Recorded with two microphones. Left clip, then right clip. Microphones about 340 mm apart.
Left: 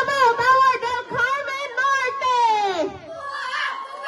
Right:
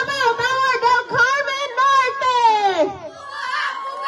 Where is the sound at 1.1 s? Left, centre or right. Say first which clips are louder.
Right 5 dB; right.